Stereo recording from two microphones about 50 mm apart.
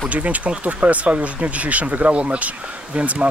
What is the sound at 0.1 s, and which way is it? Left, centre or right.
Speech, right.